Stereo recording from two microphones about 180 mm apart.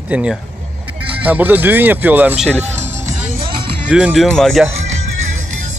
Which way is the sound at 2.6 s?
40° right (ahead or behind).